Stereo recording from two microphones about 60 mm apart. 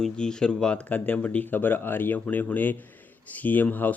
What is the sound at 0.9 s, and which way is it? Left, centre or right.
Speech, left.